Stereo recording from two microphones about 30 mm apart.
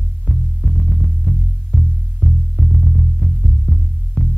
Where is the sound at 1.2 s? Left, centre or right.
Left.